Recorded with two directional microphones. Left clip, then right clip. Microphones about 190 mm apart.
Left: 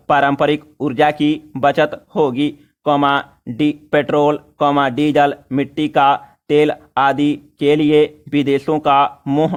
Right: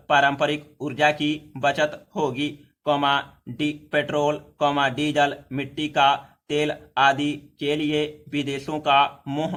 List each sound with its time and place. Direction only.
0.1 s speech: 40° left (ahead or behind)